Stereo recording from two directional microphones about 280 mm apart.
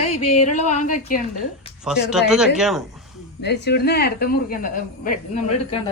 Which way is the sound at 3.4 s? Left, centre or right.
Left.